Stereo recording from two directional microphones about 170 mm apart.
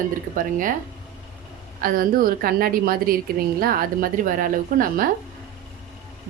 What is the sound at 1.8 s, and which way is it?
Speech, 55° right (ahead or behind).